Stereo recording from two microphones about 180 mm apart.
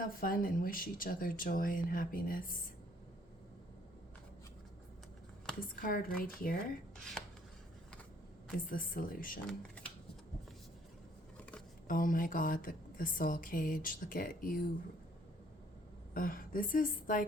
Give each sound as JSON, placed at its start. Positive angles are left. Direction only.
{"t": 0.0, "sound": "a woman's voice", "side_deg": 50}
{"t": 5.8, "sound": "a woman's voice", "side_deg": 55}
{"t": 8.5, "sound": "a woman's voice", "side_deg": 50}
{"t": 9.5, "sound": "speech", "side_deg": 5}
{"t": 11.9, "sound": "a woman's voice", "side_deg": 50}
{"t": 16.1, "sound": "a woman's voice", "side_deg": 50}